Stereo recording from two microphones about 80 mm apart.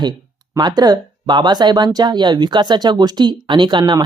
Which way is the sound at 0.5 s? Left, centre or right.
Right.